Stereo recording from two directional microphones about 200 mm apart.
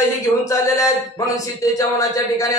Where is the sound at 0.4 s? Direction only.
15° left (ahead or behind).